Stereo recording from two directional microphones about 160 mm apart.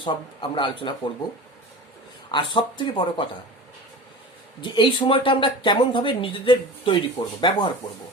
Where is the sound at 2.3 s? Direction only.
30° left (ahead or behind).